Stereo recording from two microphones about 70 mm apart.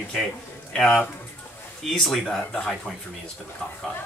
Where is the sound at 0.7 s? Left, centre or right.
Centre.